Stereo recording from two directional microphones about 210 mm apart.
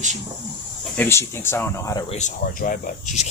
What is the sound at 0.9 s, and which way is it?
Speech, 10° left (ahead or behind).